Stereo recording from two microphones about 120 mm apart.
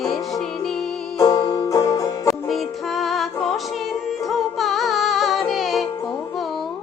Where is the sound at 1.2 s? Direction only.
30° left (ahead or behind).